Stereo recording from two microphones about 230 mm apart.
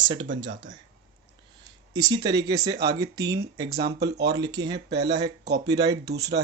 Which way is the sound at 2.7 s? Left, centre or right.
Right.